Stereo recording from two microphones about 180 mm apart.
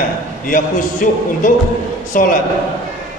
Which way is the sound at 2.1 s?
50° left (ahead or behind).